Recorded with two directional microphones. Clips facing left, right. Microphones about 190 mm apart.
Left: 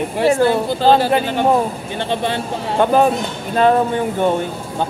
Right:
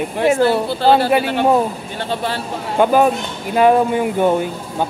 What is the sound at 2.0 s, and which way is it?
Speech, 20° left (ahead or behind).